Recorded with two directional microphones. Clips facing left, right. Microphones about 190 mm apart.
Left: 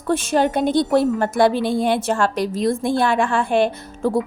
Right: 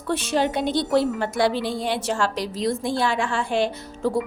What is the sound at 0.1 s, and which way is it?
A woman's voice, 50° left (ahead or behind).